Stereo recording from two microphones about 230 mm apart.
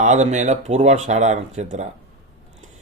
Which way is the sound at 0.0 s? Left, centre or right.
Right.